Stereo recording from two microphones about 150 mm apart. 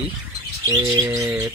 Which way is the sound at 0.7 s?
25° right (ahead or behind).